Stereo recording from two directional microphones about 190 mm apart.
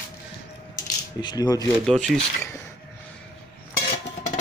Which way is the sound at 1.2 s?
20° left (ahead or behind).